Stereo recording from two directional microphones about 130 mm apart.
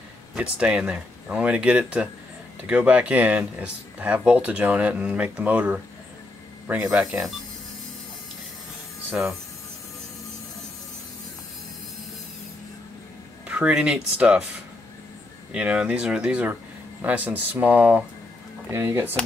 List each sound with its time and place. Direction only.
0.3 s speech: 5° right (ahead or behind)
9.2 s speech: 10° right (ahead or behind)
13.5 s speech: 10° right (ahead or behind)
15.5 s speech: 10° right (ahead or behind)